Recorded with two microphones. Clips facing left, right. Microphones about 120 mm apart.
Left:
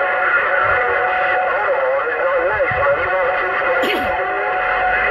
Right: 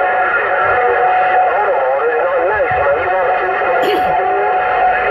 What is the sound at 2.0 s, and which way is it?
Radio, 35° right (ahead or behind).